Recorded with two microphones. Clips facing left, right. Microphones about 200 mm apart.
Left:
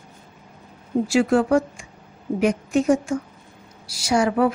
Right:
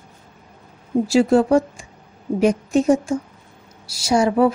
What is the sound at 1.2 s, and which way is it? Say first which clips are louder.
Speech: right 3 dB; 25° right (ahead or behind).